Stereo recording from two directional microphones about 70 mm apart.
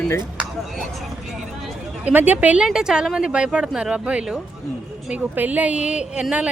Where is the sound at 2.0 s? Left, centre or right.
Right.